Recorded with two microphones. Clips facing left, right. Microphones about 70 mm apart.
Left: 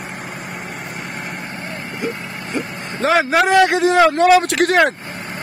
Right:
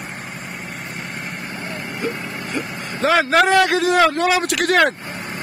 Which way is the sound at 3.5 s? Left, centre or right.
Left.